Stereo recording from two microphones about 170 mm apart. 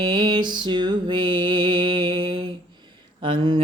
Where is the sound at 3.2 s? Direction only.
30° right (ahead or behind).